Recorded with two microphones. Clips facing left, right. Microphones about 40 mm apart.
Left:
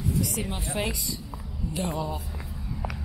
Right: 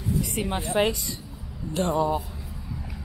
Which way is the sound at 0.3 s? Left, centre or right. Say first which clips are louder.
Right 5 dB; right.